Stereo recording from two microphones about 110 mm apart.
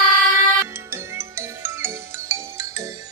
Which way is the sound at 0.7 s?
25° right (ahead or behind).